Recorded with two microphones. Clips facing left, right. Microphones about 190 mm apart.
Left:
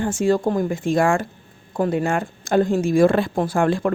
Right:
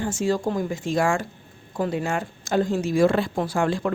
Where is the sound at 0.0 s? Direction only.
55° left (ahead or behind).